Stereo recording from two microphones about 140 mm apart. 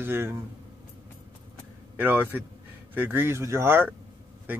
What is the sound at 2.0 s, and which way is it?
Speech, 15° right (ahead or behind).